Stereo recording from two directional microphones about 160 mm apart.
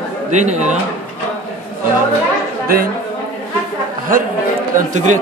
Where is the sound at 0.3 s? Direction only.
45° right (ahead or behind).